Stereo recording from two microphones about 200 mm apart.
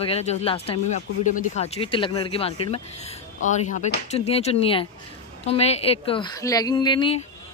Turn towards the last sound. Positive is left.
turn(degrees=25)  # may be behind; listen again after turning